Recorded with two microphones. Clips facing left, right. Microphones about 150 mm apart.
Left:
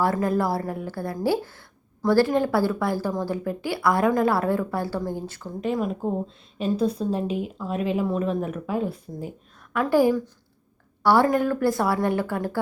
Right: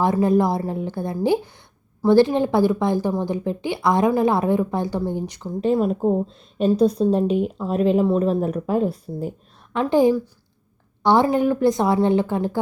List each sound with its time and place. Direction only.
0.0 s a woman's voice: 20° right (ahead or behind)
5.5 s speech: 30° right (ahead or behind)
9.8 s a woman's voice: 20° right (ahead or behind)